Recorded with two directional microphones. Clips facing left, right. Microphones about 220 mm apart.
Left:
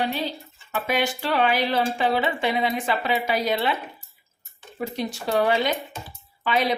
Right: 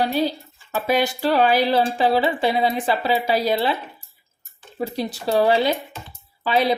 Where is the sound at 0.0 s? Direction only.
35° right (ahead or behind).